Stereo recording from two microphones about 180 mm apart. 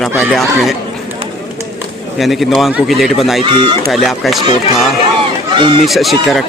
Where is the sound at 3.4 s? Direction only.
25° right (ahead or behind).